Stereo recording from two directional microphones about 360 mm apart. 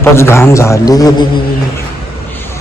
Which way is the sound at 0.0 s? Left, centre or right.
Centre.